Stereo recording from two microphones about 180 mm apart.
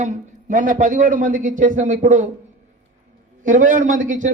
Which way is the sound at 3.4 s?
45° right (ahead or behind).